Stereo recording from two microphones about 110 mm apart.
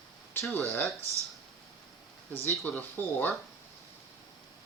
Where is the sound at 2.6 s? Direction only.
15° left (ahead or behind).